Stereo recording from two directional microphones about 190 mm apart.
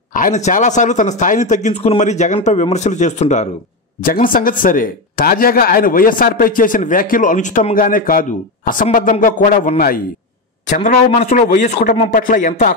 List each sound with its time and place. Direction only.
0.1 s speech: 40° left (ahead or behind)